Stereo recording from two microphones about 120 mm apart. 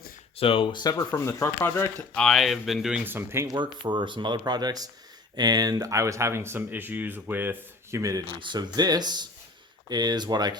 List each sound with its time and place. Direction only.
0.3 s speech: 50° left (ahead or behind)
0.9 s speech: 20° left (ahead or behind)
2.1 s speech: centre (ahead or behind)
3.0 s speech: 20° right (ahead or behind)
3.5 s speech: 40° right (ahead or behind)
8.4 s speech: 40° right (ahead or behind)